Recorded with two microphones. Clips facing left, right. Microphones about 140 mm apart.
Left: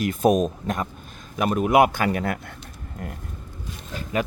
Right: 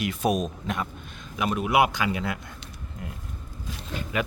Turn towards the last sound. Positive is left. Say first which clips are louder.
# left 2 dB
turn(degrees=35)  # may be behind; listen again after turning